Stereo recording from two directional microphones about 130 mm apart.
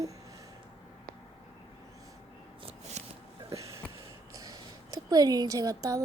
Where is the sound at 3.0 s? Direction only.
60° right (ahead or behind).